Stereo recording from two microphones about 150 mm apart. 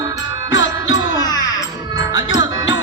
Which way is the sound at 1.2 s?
25° left (ahead or behind).